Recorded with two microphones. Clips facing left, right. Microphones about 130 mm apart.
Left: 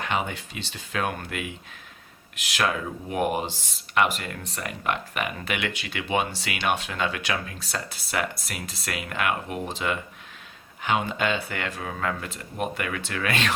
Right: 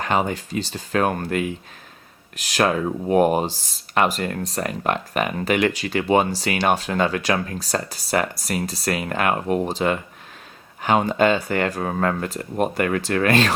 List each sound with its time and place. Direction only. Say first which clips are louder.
0.0 s speech: right 6 dB; 40° right (ahead or behind)